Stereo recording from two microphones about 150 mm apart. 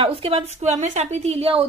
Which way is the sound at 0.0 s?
40° right (ahead or behind).